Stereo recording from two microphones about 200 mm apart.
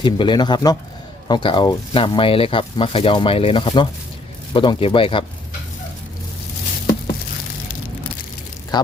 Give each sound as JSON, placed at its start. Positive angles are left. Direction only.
{"t": 0.0, "sound": "speech", "side_deg": 25}
{"t": 8.7, "sound": "speech", "side_deg": 20}